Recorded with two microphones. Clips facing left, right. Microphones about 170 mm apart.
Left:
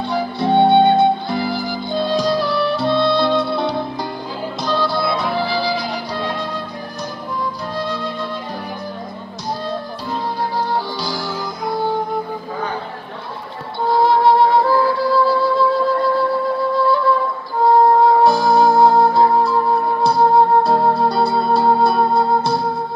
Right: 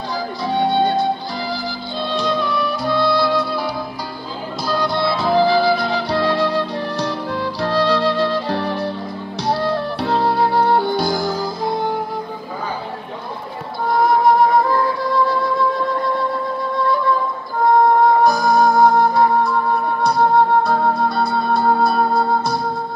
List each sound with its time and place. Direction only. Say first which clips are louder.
0.1 s music: left 5 dB; 65° left (ahead or behind); by 3.7 s 25° left (ahead or behind)
4.6 s music: even; 15° right (ahead or behind)
5.1 s music: right 5 dB; 35° right (ahead or behind)
11.6 s music: left 1 dB; 20° right (ahead or behind)
13.8 s music: left 1 dB; 25° left (ahead or behind)
18.0 s music: left 1 dB; 30° left (ahead or behind)
20.3 s music: left 2 dB; 25° left (ahead or behind)